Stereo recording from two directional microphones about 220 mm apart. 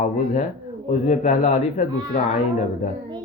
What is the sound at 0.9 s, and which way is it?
Mantra, 30° left (ahead or behind).